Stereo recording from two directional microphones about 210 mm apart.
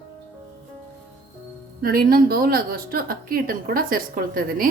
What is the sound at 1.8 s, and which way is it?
A woman's voice, 45° right (ahead or behind).